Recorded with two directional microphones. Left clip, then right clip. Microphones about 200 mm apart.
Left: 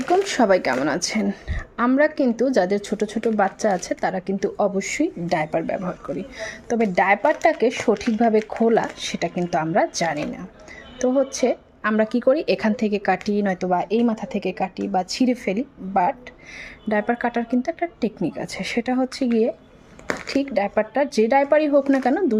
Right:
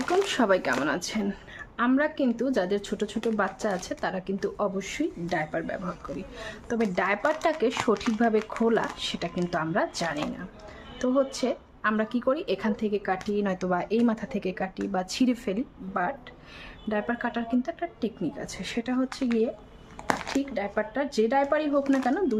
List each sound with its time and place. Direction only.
0.3 s a woman's voice: 20° left (ahead or behind)
6.4 s a woman's voice: 20° left (ahead or behind); by 13.4 s 35° left (ahead or behind)
13.4 s a woman's voice: 10° left (ahead or behind); by 19.3 s 30° left (ahead or behind)
20.3 s speech: 30° left (ahead or behind)